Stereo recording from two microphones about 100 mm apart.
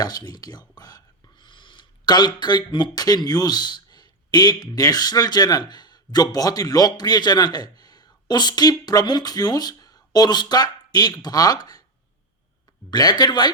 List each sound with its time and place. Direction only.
0.0 s speech: 40° left (ahead or behind)
12.9 s speech: 45° left (ahead or behind)